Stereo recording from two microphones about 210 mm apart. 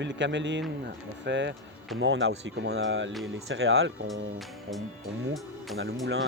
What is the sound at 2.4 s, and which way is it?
Speech, 55° right (ahead or behind).